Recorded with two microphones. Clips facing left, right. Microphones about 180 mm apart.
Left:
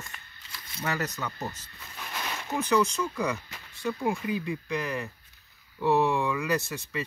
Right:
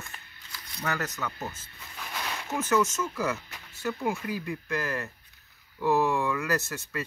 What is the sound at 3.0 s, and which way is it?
Speech, 5° right (ahead or behind).